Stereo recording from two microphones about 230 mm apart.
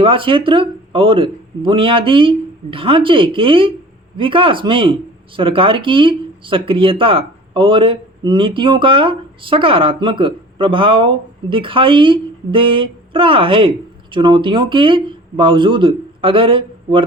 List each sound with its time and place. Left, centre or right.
0.0 s speech: right